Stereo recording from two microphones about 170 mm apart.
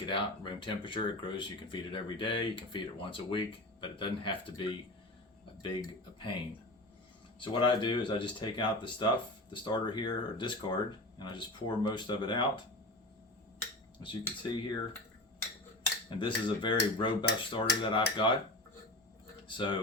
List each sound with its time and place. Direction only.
0.0 s speech: 30° left (ahead or behind)
7.3 s speech: 30° left (ahead or behind)
14.0 s speech: 25° left (ahead or behind)
16.0 s speech: 30° left (ahead or behind)
19.5 s speech: 30° left (ahead or behind)